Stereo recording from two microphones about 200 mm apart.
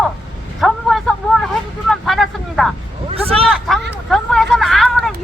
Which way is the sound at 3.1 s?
30° right (ahead or behind).